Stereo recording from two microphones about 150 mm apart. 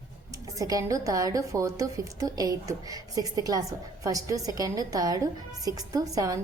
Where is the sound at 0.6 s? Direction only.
25° right (ahead or behind).